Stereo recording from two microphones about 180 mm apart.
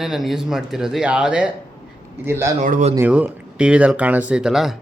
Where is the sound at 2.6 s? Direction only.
45° right (ahead or behind).